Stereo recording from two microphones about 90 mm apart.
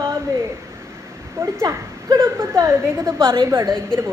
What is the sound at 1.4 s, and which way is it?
A woman's voice, 30° right (ahead or behind).